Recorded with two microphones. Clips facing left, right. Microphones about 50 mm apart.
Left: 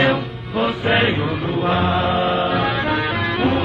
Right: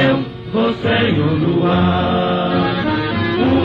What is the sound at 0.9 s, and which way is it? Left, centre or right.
Music, centre.